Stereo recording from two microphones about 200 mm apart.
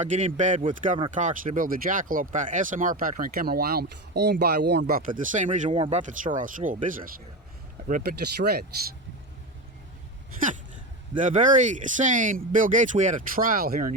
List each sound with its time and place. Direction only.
0.0 s speech: 35° right (ahead or behind)
5.7 s speech: 25° right (ahead or behind)
6.0 s speech: 40° right (ahead or behind)
8.4 s speech: 55° right (ahead or behind)
11.2 s speech: 40° right (ahead or behind)